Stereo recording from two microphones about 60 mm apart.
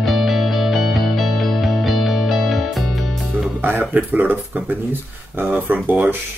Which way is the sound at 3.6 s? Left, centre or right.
Right.